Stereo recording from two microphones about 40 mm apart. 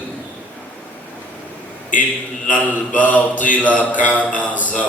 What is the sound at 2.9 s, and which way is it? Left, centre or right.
Mantra, left.